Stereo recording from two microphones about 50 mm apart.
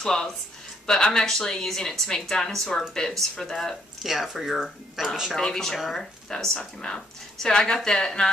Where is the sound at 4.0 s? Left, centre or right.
Centre.